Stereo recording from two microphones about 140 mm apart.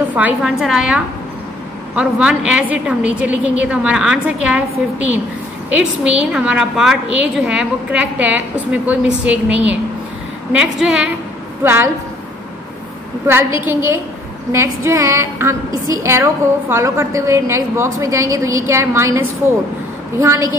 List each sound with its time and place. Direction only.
0.1 s a woman's voice: 10° right (ahead or behind)
5.7 s a woman's voice: 10° right (ahead or behind)
11.6 s a woman's voice: 15° right (ahead or behind)
13.3 s a woman's voice: 15° right (ahead or behind)